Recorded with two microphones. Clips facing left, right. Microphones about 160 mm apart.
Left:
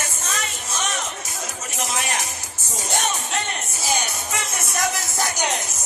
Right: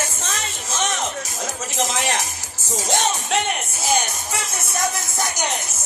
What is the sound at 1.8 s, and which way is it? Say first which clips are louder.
Music: right 4 dB; 90° right.